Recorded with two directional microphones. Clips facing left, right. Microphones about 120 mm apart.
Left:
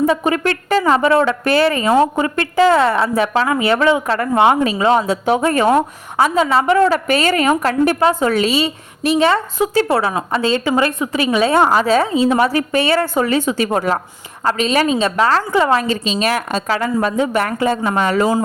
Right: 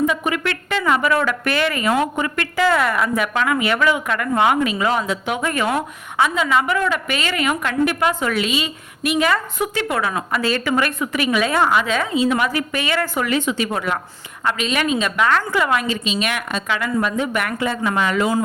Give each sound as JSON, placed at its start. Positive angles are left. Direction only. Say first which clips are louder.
{"t": 0.0, "sound": "speech", "louder": "left 5 dB", "side_deg": 35}